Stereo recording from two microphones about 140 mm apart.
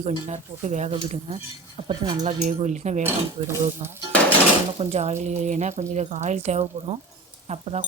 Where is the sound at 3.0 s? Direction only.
15° right (ahead or behind).